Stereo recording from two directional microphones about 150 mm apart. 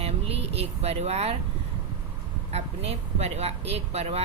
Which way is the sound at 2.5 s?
45° right (ahead or behind).